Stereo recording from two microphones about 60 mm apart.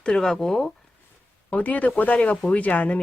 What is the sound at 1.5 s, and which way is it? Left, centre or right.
A woman's voice, left.